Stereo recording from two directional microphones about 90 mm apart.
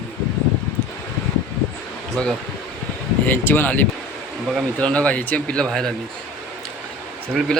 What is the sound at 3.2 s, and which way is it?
Speech, 20° left (ahead or behind).